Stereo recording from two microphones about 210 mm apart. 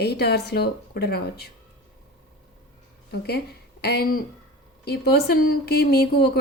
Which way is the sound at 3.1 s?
50° left (ahead or behind).